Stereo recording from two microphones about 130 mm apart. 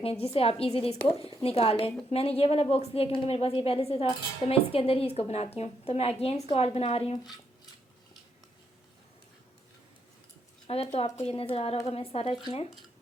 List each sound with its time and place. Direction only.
0.0 s a woman's voice: 50° left (ahead or behind)
10.7 s a woman's voice: 50° left (ahead or behind)